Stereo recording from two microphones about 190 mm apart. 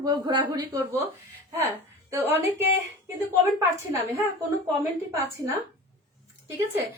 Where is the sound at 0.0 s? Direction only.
20° right (ahead or behind).